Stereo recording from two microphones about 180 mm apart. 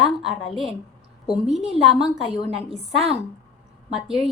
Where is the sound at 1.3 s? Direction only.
Centre (ahead or behind).